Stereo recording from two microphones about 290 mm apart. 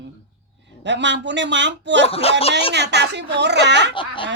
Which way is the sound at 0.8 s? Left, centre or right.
Right.